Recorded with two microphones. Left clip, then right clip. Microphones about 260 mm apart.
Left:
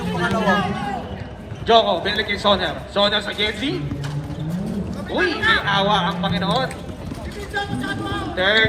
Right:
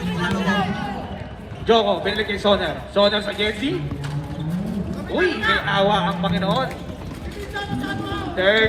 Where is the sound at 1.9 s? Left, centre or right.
Left.